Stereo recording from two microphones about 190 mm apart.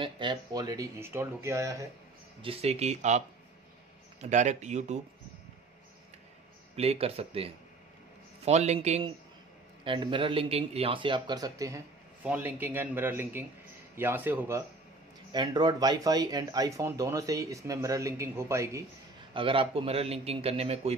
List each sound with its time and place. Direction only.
0.0 s speech: 25° right (ahead or behind)
2.4 s a man's voice: 30° right (ahead or behind)
6.7 s a man's voice: 30° right (ahead or behind); by 14.6 s 10° right (ahead or behind)
15.3 s speech: 20° right (ahead or behind)
19.3 s a man's voice: 25° right (ahead or behind)